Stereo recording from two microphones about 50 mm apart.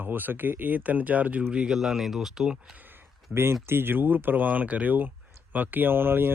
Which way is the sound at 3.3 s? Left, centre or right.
Right.